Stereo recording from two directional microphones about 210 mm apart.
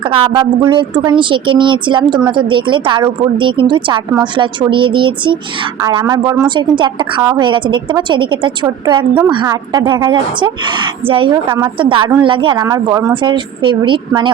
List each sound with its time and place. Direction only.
0.0 s a woman's voice: 25° right (ahead or behind)
11.4 s a woman's voice: 10° right (ahead or behind)
11.8 s a woman's voice: 25° right (ahead or behind)